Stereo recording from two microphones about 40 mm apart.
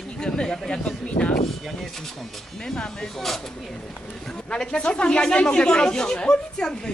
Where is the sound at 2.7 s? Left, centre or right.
Centre.